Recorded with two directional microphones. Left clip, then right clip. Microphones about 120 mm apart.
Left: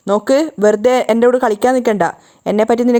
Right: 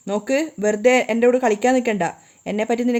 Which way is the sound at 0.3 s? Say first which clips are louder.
Left 8 dB; 55° left (ahead or behind).